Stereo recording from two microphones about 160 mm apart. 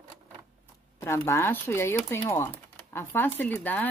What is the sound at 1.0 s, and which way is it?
Speech, 15° left (ahead or behind).